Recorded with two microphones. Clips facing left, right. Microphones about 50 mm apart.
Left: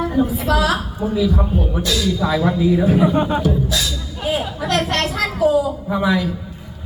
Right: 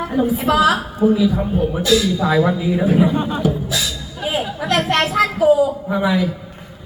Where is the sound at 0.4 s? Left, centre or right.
Centre.